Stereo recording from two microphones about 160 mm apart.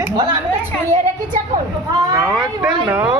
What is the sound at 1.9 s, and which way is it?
Speech, 25° right (ahead or behind).